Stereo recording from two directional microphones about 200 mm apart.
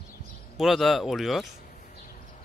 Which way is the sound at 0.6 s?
Centre (ahead or behind).